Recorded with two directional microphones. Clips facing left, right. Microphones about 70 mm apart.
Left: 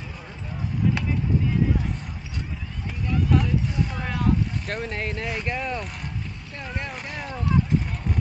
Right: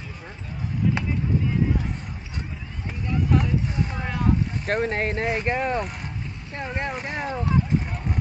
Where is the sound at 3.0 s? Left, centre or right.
Centre.